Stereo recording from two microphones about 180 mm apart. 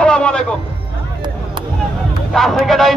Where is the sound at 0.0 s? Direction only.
5° left (ahead or behind).